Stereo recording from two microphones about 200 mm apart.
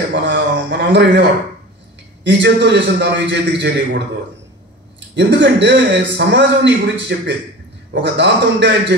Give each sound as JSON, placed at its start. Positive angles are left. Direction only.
{"t": 0.1, "sound": "a sound", "side_deg": -65}
{"t": 2.2, "sound": "a man's voice", "side_deg": -65}
{"t": 5.1, "sound": "a man's voice", "side_deg": -65}